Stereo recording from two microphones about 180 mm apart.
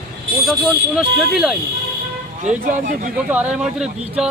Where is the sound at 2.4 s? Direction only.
45° right (ahead or behind).